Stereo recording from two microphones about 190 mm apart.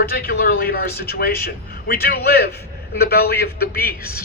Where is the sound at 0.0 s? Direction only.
55° left (ahead or behind).